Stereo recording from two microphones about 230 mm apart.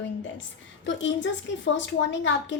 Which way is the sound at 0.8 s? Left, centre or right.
Left.